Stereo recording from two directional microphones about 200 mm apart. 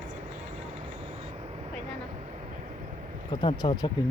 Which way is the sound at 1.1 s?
30° right (ahead or behind).